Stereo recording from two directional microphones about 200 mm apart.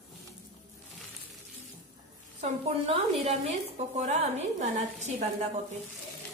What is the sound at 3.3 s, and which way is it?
A woman's voice, 30° right (ahead or behind).